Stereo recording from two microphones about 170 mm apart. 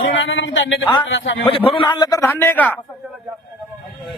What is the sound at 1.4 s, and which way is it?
A man's voice, 30° left (ahead or behind).